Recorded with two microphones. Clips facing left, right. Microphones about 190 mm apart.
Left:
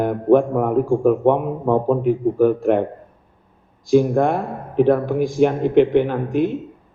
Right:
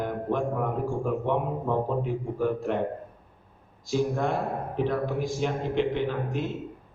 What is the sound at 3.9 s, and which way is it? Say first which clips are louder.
Speech: left 10 dB; 55° left (ahead or behind).